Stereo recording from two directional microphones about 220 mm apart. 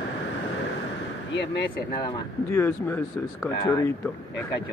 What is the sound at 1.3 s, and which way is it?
Speech, 50° left (ahead or behind).